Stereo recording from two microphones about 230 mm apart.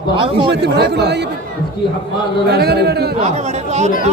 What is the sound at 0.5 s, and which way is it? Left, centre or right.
Speech, right.